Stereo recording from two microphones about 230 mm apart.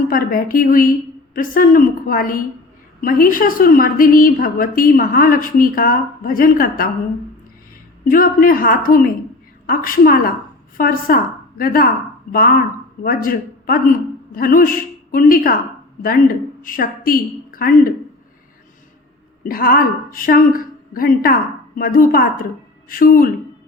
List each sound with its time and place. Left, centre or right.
0.1 s a woman's voice: left
8.1 s a woman's voice: left
19.5 s a woman's voice: left